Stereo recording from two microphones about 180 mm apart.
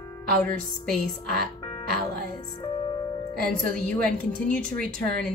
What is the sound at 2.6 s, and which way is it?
Music, 25° left (ahead or behind).